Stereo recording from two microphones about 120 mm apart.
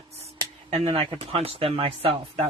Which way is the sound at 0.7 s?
60° right (ahead or behind).